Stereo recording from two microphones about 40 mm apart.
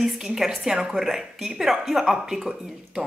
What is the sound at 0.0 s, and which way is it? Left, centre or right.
Speech, centre.